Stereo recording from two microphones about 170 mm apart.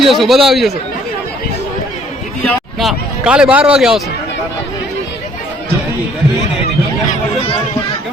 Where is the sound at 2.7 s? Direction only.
5° right (ahead or behind).